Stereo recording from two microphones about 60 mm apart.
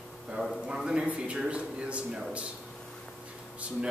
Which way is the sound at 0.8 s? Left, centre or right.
Centre.